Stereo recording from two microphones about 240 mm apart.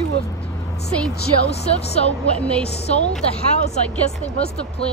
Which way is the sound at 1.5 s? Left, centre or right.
Left.